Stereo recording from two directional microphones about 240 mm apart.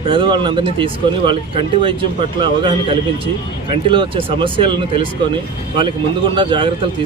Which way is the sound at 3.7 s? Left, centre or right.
Right.